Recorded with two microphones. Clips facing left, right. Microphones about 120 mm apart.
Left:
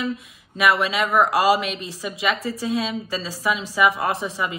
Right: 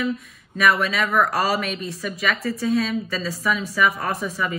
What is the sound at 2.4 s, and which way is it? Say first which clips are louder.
Speech: right 2 dB; 60° right (ahead or behind).